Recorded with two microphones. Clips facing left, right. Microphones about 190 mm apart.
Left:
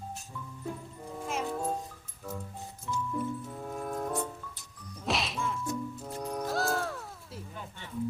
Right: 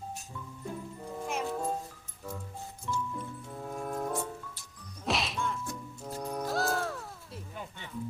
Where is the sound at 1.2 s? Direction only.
Centre (ahead or behind).